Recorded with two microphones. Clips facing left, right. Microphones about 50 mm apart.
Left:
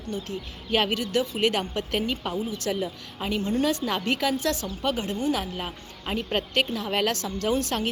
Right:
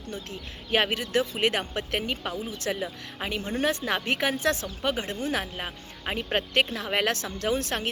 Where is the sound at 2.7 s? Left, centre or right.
Right.